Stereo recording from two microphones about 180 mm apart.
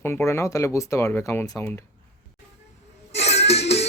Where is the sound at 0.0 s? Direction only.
15° left (ahead or behind).